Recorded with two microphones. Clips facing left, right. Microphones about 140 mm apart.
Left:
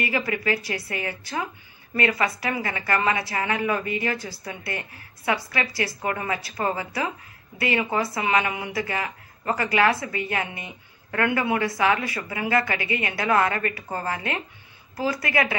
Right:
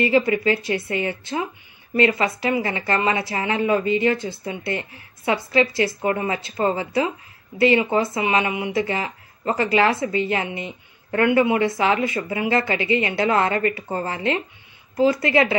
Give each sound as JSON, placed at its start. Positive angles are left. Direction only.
{"t": 0.0, "sound": "speech", "side_deg": -25}